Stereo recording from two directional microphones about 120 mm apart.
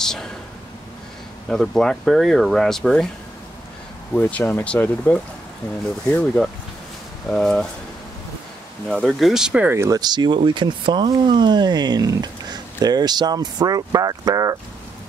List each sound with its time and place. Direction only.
0.0 s a sound: 5° left (ahead or behind)
1.5 s speech: 5° left (ahead or behind)
4.1 s speech: 15° left (ahead or behind)
8.8 s speech: centre (ahead or behind)
9.7 s speech: 20° right (ahead or behind)
9.9 s speech: 35° right (ahead or behind)